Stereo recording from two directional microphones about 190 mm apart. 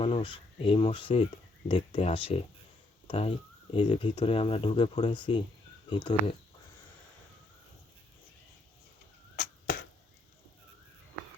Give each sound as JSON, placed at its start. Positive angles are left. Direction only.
{"t": 0.0, "sound": "speech", "side_deg": 30}
{"t": 9.3, "sound": "arrow", "side_deg": 50}